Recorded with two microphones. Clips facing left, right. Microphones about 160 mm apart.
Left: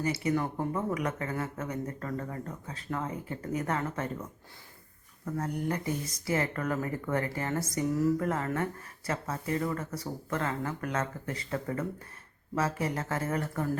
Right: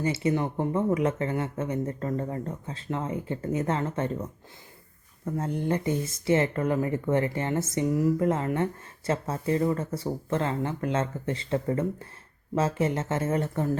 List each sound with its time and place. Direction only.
0.0 s speech: 25° right (ahead or behind)
5.2 s speech: 25° right (ahead or behind)